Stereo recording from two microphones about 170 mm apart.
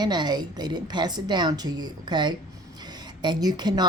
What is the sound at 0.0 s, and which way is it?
A woman's voice, 25° right (ahead or behind).